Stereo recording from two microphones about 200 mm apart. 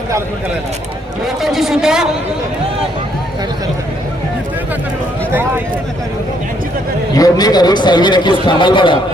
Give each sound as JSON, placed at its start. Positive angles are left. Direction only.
{"t": 1.4, "sound": "speech", "side_deg": 0}
{"t": 7.1, "sound": "a man's voice", "side_deg": 20}